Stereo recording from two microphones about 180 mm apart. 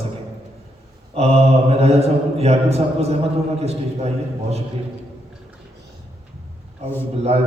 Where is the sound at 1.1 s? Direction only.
35° right (ahead or behind).